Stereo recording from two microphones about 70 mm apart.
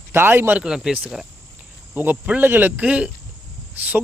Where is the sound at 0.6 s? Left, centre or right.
Centre.